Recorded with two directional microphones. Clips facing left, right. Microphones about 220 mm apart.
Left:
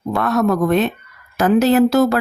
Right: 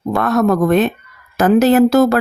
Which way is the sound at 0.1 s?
50° right (ahead or behind).